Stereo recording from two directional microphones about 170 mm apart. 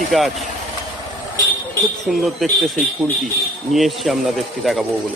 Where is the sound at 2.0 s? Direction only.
Centre (ahead or behind).